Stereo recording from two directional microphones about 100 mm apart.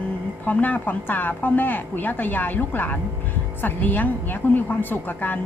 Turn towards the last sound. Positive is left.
turn(degrees=20)  # may be behind; listen again after turning